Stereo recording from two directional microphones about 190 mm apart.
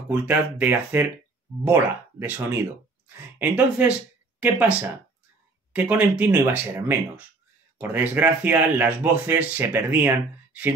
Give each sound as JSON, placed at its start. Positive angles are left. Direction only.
{"t": 0.1, "sound": "speech", "side_deg": -10}